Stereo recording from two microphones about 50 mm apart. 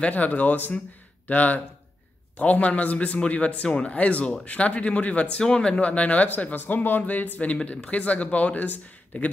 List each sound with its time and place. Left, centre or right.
0.0 s speech: left